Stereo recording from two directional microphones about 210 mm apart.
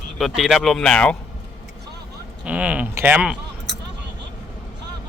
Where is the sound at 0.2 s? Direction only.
Centre (ahead or behind).